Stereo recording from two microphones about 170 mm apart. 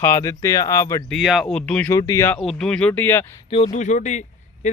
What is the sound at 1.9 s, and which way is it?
Speech, 20° left (ahead or behind).